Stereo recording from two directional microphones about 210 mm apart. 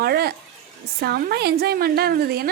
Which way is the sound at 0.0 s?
50° right (ahead or behind).